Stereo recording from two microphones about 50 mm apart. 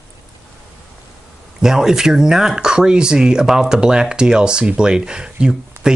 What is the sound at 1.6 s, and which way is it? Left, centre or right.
Speech, centre.